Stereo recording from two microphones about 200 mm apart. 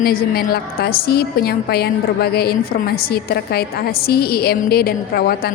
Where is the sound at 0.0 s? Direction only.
50° left (ahead or behind).